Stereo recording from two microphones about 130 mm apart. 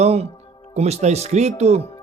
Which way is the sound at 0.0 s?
55° right (ahead or behind).